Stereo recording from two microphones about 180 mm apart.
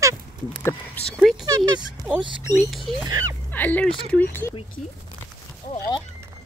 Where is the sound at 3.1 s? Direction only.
20° right (ahead or behind).